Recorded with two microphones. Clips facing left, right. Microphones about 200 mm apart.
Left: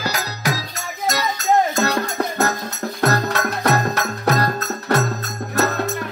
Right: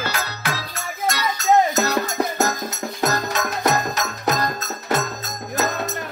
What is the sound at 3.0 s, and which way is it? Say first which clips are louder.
Music: left 3 dB; 60° left (ahead or behind).